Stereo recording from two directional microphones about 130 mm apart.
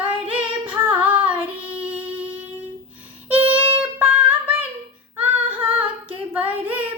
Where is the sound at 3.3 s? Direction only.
10° right (ahead or behind).